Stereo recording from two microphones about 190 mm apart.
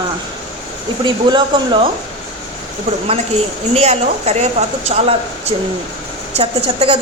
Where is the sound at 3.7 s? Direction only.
35° right (ahead or behind).